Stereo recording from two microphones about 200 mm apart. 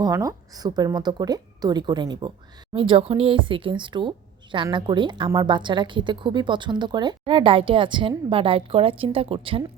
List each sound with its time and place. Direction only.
0.0 s a woman's voice: 15° right (ahead or behind)